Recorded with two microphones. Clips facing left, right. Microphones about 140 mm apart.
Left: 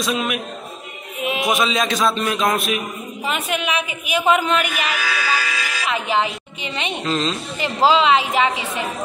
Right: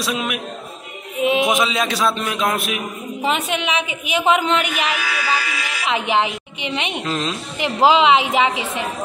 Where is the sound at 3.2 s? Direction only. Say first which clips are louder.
Right 2 dB; 25° right (ahead or behind).